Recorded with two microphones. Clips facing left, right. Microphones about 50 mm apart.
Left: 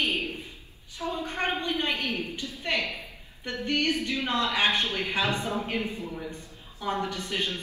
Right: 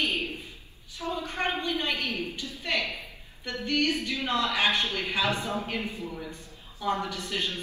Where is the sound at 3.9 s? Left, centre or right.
Left.